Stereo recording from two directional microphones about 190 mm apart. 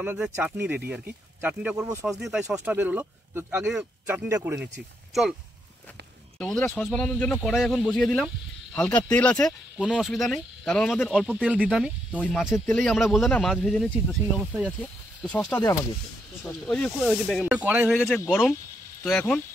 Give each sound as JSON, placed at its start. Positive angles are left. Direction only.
{"t": 0.0, "sound": "speech", "side_deg": -10}
{"t": 1.9, "sound": "speech", "side_deg": -15}
{"t": 2.1, "sound": "speech", "side_deg": -5}
{"t": 6.3, "sound": "speech", "side_deg": 0}
{"t": 14.8, "sound": "speech", "side_deg": 5}
{"t": 16.6, "sound": "speech", "side_deg": 5}